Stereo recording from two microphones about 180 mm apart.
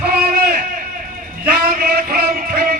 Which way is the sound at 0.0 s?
55° right (ahead or behind).